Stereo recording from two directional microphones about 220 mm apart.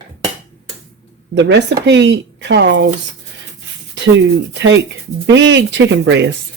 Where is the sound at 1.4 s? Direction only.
55° right (ahead or behind).